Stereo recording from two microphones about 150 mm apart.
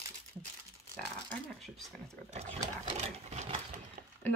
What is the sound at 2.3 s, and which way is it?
Speech, 45° right (ahead or behind).